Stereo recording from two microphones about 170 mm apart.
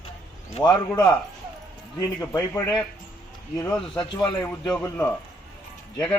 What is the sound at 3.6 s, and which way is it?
A man's voice, 5° left (ahead or behind).